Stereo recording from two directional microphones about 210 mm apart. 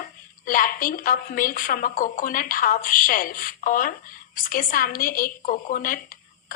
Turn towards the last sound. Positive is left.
turn(degrees=40)  # may be behind; listen again after turning